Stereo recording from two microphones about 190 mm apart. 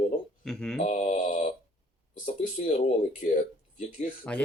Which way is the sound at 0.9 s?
40° left (ahead or behind).